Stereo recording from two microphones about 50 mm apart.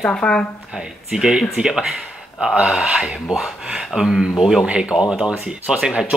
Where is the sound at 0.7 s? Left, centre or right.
Centre.